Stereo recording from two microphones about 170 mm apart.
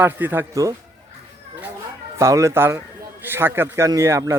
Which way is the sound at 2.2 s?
20° right (ahead or behind).